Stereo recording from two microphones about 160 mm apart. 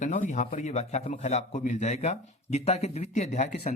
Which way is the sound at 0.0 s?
50° left (ahead or behind).